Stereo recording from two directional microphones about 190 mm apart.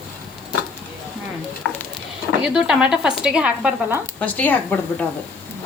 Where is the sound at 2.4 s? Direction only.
5° right (ahead or behind).